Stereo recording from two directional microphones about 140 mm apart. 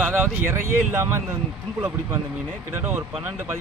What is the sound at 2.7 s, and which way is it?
Speech, 15° right (ahead or behind).